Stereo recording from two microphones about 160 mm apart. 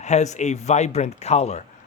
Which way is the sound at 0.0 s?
45° left (ahead or behind).